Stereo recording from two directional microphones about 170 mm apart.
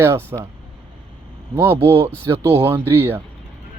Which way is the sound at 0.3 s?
20° right (ahead or behind).